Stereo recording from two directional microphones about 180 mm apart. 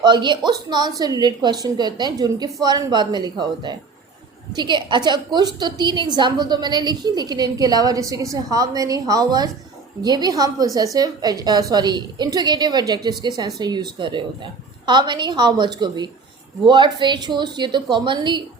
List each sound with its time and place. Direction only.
0.0 s a woman's voice: 25° right (ahead or behind)